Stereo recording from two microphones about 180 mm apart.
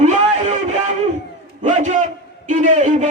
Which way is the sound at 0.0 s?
40° right (ahead or behind).